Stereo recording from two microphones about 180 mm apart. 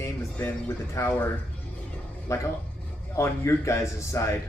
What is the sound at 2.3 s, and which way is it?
Speech, 20° left (ahead or behind).